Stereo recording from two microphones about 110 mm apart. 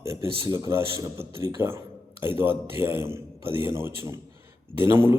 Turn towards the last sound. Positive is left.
turn(degrees=-20)  # may be behind; listen again after turning